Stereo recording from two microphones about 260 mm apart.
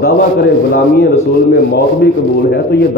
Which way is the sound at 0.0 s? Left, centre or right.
Left.